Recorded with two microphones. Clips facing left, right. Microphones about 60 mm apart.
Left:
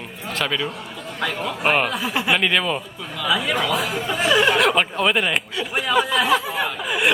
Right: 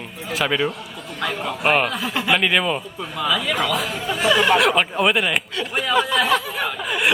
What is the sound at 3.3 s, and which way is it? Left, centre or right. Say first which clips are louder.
A woman's voice: left 1 dB; centre.